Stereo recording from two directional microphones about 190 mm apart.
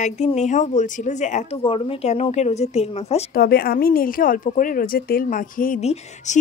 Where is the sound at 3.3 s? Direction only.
55° left (ahead or behind).